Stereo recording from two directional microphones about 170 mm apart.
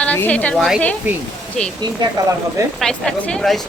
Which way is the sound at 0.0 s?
10° left (ahead or behind).